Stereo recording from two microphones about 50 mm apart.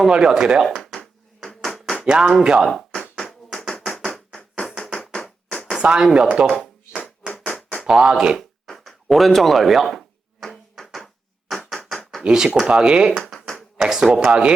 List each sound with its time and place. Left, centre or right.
0.0 s speech: centre
0.8 s hands: centre
2.0 s speech: centre
2.6 s speech: centre
3.5 s a sound: centre
4.0 s a sound: centre
5.7 s speech: centre
7.4 s a sound: left
7.9 s speech: centre
8.6 s speech: centre
10.4 s a sound: centre
12.6 s speech: centre